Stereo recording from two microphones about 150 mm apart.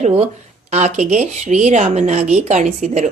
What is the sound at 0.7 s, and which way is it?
Speech, 50° right (ahead or behind).